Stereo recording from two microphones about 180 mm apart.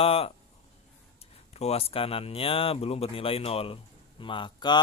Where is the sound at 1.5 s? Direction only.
35° left (ahead or behind).